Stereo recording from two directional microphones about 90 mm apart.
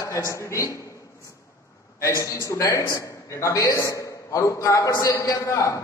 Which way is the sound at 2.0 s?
35° left (ahead or behind).